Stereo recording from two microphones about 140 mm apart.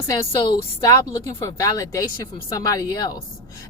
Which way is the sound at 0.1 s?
30° left (ahead or behind).